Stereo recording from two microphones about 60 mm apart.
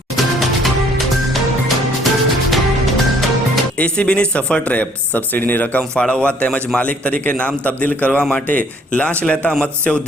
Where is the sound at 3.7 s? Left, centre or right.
Centre.